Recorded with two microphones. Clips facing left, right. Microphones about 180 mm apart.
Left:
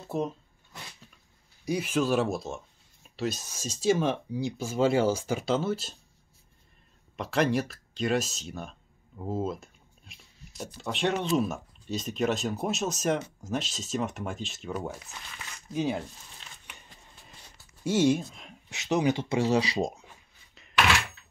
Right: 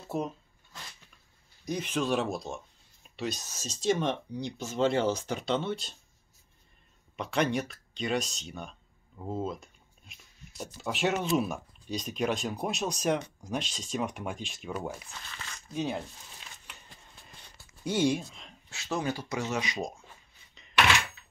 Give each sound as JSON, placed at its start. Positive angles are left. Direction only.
{"t": 0.1, "sound": "speech", "side_deg": 0}
{"t": 1.6, "sound": "speech", "side_deg": 10}
{"t": 7.2, "sound": "speech", "side_deg": 0}
{"t": 17.8, "sound": "speech", "side_deg": 5}
{"t": 18.7, "sound": "speech", "side_deg": 20}
{"t": 20.5, "sound": "a sound", "side_deg": 5}